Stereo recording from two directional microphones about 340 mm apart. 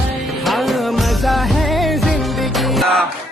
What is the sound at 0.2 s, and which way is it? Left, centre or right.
Music, centre.